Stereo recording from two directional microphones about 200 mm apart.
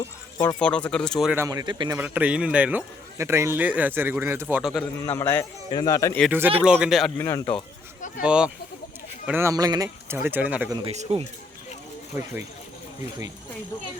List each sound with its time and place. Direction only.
0.6 s speech: 5° left (ahead or behind)
1.5 s a man's voice: 20° right (ahead or behind)
2.0 s a man's voice: 5° right (ahead or behind)
4.9 s a man's voice: 10° left (ahead or behind)
6.3 s a man's voice: 10° right (ahead or behind)
7.2 s a man's voice: 15° left (ahead or behind)
8.2 s a man's voice: 5° right (ahead or behind)
11.1 s speech: 30° right (ahead or behind)